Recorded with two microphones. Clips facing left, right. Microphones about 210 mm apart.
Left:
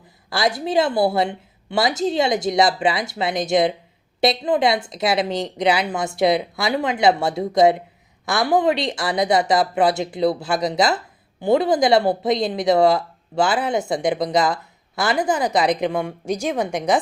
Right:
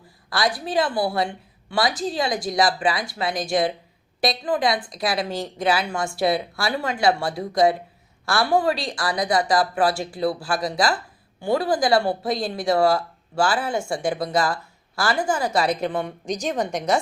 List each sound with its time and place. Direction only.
0.3 s speech: 25° left (ahead or behind)